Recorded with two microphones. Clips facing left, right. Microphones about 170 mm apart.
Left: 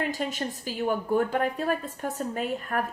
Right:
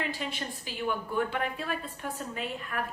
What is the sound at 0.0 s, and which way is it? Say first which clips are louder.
A woman's voice: left 5 dB; 45° left (ahead or behind).